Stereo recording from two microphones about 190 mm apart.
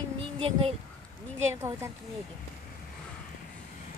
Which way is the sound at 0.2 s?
30° right (ahead or behind).